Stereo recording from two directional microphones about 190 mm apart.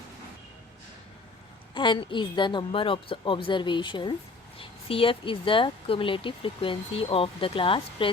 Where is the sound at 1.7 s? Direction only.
25° left (ahead or behind).